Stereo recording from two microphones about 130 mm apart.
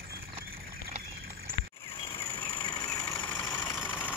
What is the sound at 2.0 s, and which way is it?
Vehicle, 45° left (ahead or behind).